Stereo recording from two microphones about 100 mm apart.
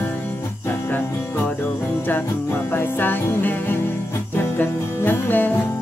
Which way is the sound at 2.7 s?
20° left (ahead or behind).